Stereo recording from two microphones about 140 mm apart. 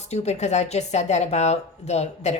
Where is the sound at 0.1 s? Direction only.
50° left (ahead or behind).